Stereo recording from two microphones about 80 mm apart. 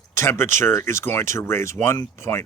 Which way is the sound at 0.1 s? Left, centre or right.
Left.